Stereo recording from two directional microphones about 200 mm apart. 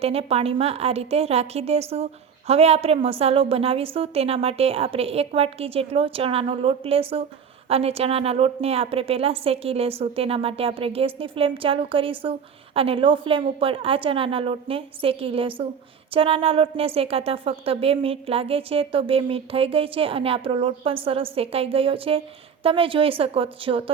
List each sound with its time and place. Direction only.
0.0 s a woman's voice: 30° right (ahead or behind)